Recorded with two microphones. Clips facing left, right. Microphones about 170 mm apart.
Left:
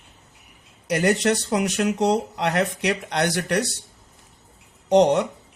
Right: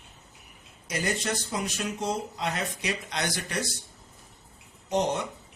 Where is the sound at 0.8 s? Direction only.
70° left (ahead or behind).